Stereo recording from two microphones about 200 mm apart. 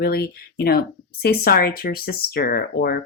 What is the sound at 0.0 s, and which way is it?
Speech, 50° left (ahead or behind).